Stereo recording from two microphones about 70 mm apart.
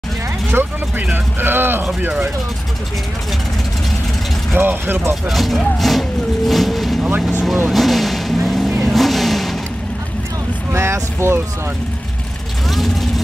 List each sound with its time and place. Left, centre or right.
0.5 s speech: right
4.6 s speech: right
5.3 s vehicle: centre
10.7 s speech: right
12.6 s vehicle: centre